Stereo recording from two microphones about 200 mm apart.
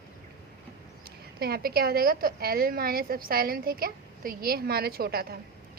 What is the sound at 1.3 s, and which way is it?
A woman's voice, 50° right (ahead or behind).